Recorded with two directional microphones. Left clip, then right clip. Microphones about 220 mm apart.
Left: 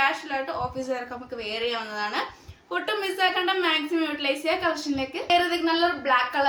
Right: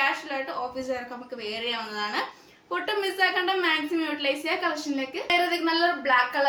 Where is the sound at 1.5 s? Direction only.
15° left (ahead or behind).